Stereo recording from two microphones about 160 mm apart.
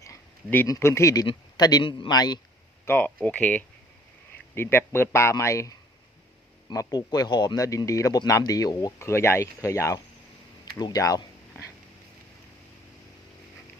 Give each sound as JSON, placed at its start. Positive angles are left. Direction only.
{"t": 0.0, "sound": "a sound", "side_deg": 15}
{"t": 0.7, "sound": "speech", "side_deg": 15}
{"t": 2.8, "sound": "a man's voice", "side_deg": 10}